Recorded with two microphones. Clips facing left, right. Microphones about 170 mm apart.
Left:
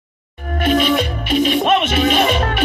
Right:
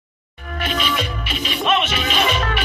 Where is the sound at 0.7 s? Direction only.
50° left (ahead or behind).